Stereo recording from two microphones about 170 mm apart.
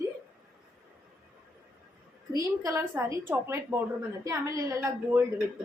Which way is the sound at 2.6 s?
20° right (ahead or behind).